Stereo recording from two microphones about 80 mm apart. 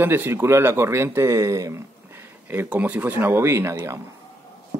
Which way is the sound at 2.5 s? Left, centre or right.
Right.